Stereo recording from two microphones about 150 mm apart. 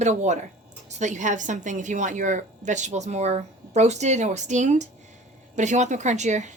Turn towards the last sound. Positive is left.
turn(degrees=-50)  # may be behind; listen again after turning